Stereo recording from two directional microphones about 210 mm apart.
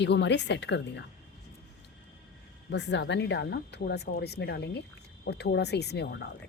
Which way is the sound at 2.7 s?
55° left (ahead or behind).